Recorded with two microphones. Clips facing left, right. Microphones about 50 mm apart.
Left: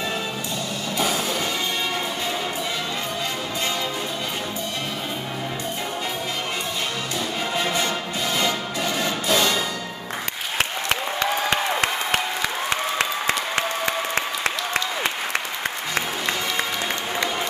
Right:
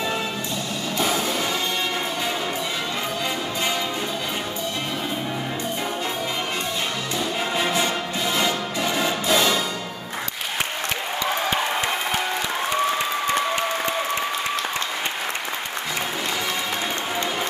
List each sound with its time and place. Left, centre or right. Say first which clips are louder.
0.9 s music: right 1 dB; centre
7.5 s music: right 1 dB; centre
11.5 s crowd: left 1 dB; left
13.3 s applause: right 2 dB; left